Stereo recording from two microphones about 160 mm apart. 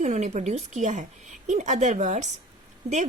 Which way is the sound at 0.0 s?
50° right (ahead or behind).